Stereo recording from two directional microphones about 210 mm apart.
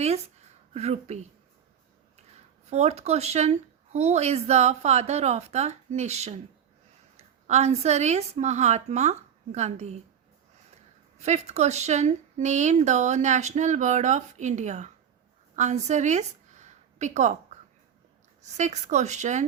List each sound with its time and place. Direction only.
0.7 s speech: 30° right (ahead or behind)
2.6 s speech: 30° right (ahead or behind)
7.4 s speech: 30° right (ahead or behind)
11.2 s speech: 30° right (ahead or behind)
15.5 s a sound: 35° right (ahead or behind)
18.5 s speech: 35° right (ahead or behind)